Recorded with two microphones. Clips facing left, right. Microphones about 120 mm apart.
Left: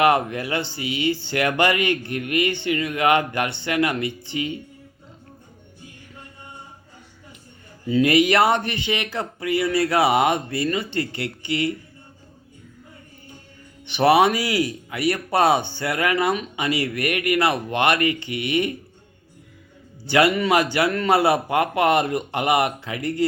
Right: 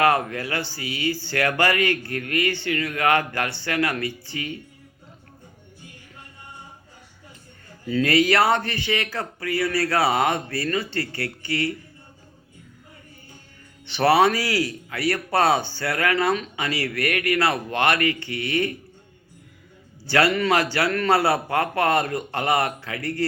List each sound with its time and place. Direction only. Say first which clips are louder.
0.0 s speech: left 2 dB; 20° left (ahead or behind)
7.9 s speech: left 2 dB; 20° left (ahead or behind)
13.8 s speech: left 1 dB; 15° left (ahead or behind)
20.1 s speech: left 2 dB; 15° left (ahead or behind)